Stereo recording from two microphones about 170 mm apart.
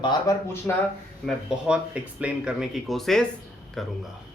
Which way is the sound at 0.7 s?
10° left (ahead or behind).